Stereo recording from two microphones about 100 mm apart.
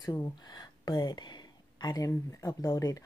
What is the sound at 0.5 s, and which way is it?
Speech, 40° left (ahead or behind).